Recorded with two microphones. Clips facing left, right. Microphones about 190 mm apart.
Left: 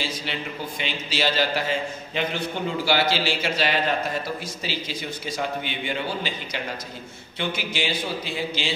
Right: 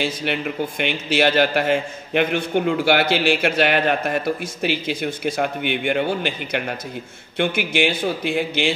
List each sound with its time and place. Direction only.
0.0 s a man's voice: 60° right (ahead or behind)